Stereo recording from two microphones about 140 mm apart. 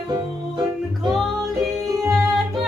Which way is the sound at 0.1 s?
30° right (ahead or behind).